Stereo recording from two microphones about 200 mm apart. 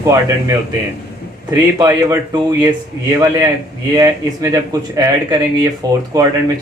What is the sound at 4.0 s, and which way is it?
A man's voice, 15° right (ahead or behind).